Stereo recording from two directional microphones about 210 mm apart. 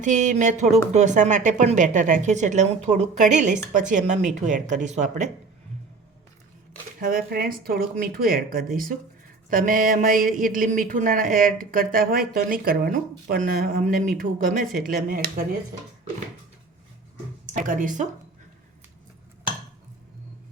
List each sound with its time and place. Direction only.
0.0 s speech: 35° right (ahead or behind)
7.0 s speech: 45° right (ahead or behind)
17.5 s speech: 40° right (ahead or behind)